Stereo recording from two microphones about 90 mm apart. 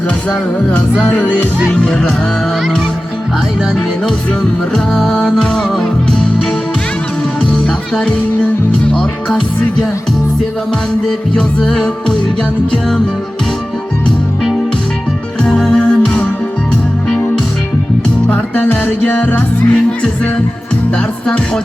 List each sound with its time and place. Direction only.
1.0 s music: 10° left (ahead or behind)
4.7 s music: 5° left (ahead or behind)
7.5 s music: 10° left (ahead or behind)
11.3 s music: 5° left (ahead or behind)
15.4 s music: 10° left (ahead or behind)
18.3 s music: 20° left (ahead or behind)